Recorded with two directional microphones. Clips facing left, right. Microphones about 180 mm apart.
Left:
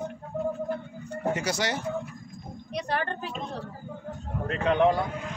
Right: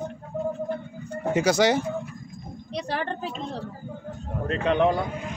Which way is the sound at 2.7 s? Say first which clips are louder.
Right 1 dB; 30° right (ahead or behind).